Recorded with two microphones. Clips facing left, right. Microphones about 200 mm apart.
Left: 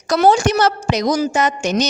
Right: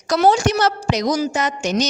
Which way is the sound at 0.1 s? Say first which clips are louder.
Left 2 dB; 55° left (ahead or behind).